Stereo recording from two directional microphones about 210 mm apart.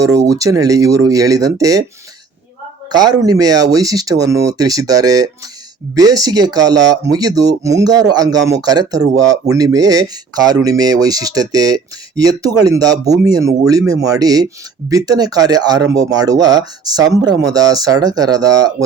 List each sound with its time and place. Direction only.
0.0 s speech: 15° right (ahead or behind)
2.9 s speech: 20° right (ahead or behind)